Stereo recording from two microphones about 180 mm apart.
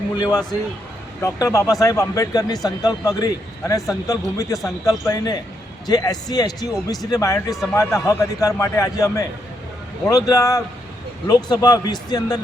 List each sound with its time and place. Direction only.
0.2 s a man's voice: 20° left (ahead or behind)